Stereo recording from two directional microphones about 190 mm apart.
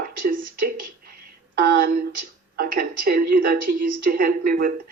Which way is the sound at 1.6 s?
50° right (ahead or behind).